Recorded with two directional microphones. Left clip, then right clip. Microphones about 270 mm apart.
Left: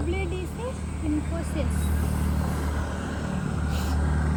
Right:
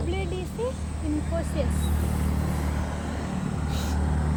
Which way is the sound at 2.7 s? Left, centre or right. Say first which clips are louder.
Even; right.